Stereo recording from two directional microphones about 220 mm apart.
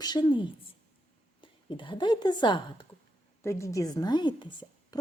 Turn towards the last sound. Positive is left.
turn(degrees=20)  # may be behind; listen again after turning